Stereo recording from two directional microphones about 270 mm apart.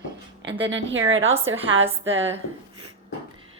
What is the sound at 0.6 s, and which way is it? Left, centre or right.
Speech, right.